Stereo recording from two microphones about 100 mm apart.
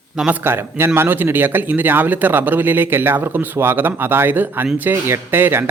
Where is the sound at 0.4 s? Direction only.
25° right (ahead or behind).